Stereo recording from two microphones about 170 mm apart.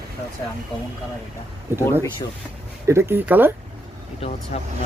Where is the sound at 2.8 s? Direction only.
15° right (ahead or behind).